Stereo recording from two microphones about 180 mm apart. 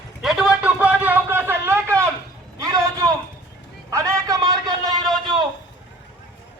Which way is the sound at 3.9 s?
20° right (ahead or behind).